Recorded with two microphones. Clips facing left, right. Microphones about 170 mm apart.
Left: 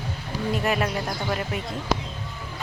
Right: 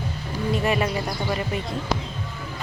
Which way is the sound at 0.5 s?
Centre (ahead or behind).